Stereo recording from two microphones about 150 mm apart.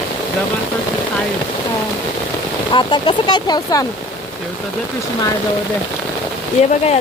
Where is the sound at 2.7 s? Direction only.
35° left (ahead or behind).